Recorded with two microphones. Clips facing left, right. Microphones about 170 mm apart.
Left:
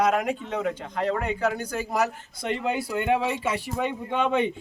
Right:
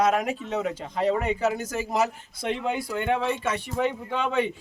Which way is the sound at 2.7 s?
5° left (ahead or behind).